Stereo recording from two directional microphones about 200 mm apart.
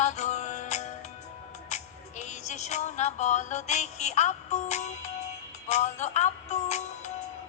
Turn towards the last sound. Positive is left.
turn(degrees=35)  # may be behind; listen again after turning